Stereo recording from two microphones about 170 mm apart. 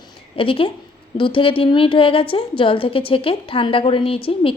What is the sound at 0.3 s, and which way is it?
A woman's voice, 30° left (ahead or behind).